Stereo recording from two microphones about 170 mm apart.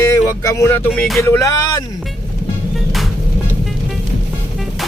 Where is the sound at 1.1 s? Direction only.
15° left (ahead or behind).